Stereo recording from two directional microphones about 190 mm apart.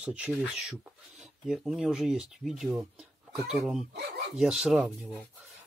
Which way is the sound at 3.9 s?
65° right (ahead or behind).